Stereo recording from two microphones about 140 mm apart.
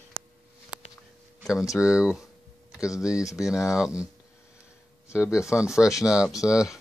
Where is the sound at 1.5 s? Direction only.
20° left (ahead or behind).